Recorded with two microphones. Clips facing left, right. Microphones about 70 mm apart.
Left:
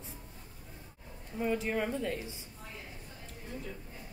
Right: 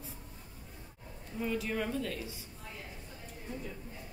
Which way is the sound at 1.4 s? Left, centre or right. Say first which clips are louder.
Left 3 dB; left.